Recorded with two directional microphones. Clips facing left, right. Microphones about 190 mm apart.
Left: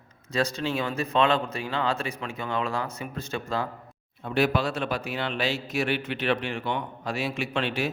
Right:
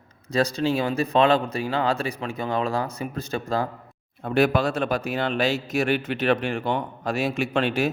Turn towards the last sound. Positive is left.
turn(degrees=-45)  # may be behind; listen again after turning